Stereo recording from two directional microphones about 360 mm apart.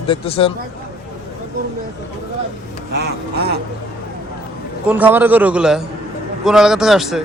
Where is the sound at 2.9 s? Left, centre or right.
Right.